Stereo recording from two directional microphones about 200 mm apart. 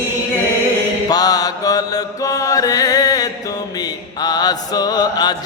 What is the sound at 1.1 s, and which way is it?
Mantra, 20° left (ahead or behind).